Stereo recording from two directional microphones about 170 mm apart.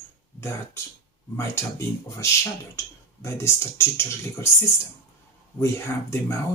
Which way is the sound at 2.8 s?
15° left (ahead or behind).